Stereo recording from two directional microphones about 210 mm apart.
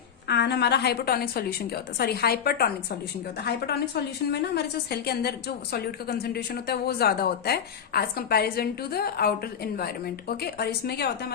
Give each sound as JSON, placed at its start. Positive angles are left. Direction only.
{"t": 0.3, "sound": "a woman's voice", "side_deg": 55}